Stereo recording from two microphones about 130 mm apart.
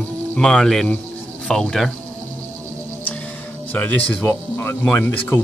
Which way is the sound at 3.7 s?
10° left (ahead or behind).